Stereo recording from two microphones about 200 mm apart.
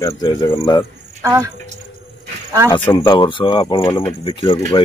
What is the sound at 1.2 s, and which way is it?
Speech, 15° right (ahead or behind).